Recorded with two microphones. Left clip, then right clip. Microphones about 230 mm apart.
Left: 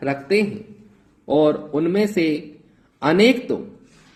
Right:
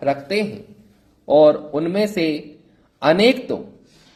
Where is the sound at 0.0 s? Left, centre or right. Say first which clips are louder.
Even; centre.